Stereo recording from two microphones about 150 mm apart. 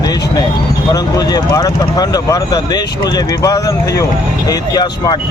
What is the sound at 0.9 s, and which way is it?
Speech, 25° left (ahead or behind).